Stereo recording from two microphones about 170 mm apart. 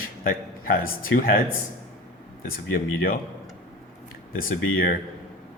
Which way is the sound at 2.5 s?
60° left (ahead or behind).